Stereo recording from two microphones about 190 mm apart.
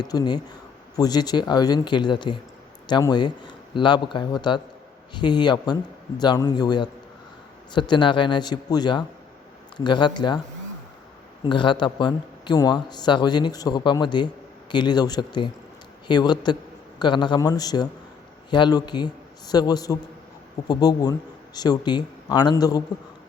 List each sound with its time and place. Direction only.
0.0 s speech: 20° left (ahead or behind)
11.4 s speech: 25° left (ahead or behind)